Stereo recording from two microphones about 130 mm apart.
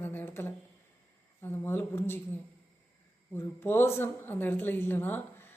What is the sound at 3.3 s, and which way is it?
A man's voice, 15° left (ahead or behind).